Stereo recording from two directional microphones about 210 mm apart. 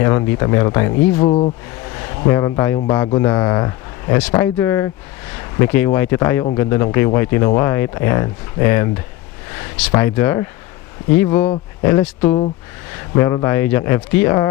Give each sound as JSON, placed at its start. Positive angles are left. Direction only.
{"t": 0.0, "sound": "speech", "side_deg": 15}
{"t": 1.2, "sound": "speech", "side_deg": 30}